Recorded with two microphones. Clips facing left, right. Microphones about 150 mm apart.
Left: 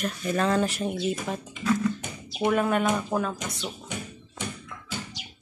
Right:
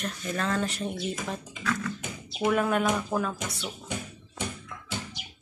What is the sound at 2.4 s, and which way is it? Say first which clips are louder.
Speech: left 1 dB; centre (ahead or behind).